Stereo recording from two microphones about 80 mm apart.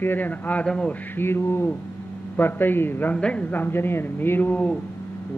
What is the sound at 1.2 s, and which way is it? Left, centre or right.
A man's voice, left.